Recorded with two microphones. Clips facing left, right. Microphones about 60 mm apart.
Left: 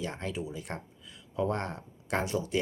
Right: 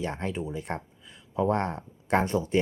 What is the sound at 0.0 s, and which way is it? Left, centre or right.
Speech, right.